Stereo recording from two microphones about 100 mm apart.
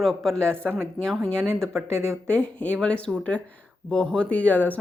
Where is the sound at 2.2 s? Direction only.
10° left (ahead or behind).